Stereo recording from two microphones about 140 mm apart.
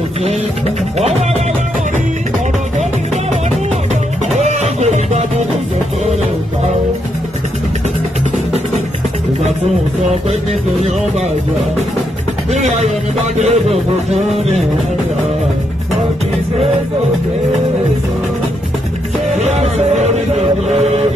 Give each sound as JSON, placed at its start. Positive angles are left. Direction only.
{"t": 4.3, "sound": "music", "side_deg": -55}
{"t": 12.5, "sound": "music", "side_deg": -55}
{"t": 19.4, "sound": "music", "side_deg": -55}